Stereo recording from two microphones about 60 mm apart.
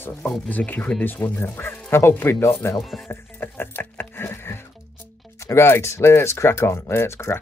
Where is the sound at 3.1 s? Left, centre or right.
Left.